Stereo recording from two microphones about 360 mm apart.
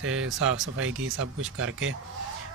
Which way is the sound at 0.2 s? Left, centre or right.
Right.